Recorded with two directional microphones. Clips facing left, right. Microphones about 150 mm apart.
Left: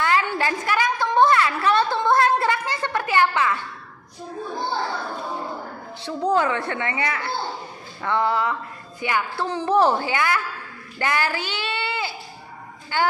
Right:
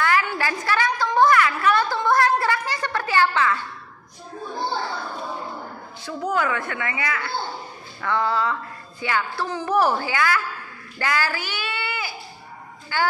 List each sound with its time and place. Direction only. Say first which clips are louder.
0.0 s a woman's voice: left 1 dB; 25° left (ahead or behind)
6.0 s a woman's voice: left 3 dB; 30° left (ahead or behind)